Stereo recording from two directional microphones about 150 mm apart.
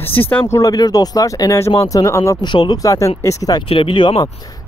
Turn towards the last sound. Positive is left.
turn(degrees=30)  # may be behind; listen again after turning